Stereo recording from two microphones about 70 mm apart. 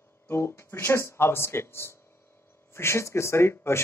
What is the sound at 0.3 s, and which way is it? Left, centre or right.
Speech, left.